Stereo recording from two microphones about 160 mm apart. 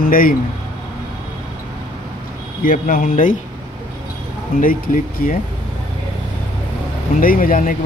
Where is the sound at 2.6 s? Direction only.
60° left (ahead or behind).